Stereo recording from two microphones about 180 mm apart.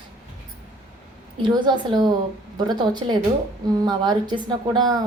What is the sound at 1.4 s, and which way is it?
Speech, 25° right (ahead or behind).